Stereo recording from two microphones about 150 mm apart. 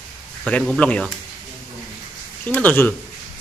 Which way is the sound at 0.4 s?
5° left (ahead or behind).